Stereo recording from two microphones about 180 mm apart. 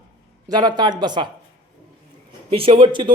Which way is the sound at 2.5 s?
30° right (ahead or behind).